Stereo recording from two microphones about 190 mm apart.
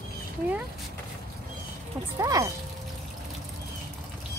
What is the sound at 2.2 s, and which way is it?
Speech, 15° right (ahead or behind).